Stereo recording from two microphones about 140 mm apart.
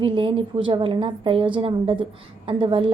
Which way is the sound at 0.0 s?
40° right (ahead or behind).